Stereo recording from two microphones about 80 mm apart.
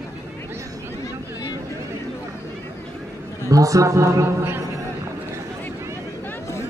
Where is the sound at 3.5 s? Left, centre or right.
Right.